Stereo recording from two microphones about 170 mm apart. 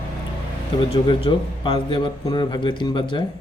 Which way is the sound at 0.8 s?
30° left (ahead or behind).